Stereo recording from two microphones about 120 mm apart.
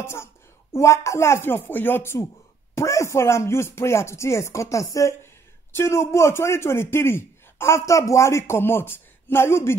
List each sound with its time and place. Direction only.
0.0 s a woman's voice: 20° left (ahead or behind)